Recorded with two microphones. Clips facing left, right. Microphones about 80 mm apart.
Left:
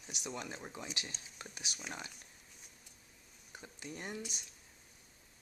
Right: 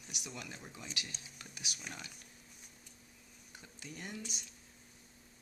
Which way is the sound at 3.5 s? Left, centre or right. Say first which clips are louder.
Left 3 dB; left.